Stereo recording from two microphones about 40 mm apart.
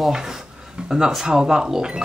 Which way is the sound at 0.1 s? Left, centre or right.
Centre.